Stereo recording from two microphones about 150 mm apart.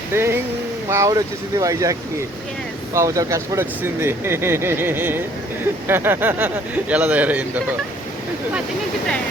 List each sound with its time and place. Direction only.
0.1 s speech: 15° right (ahead or behind)